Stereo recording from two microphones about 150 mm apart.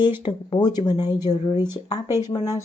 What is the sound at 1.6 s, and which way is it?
Speech, 25° left (ahead or behind).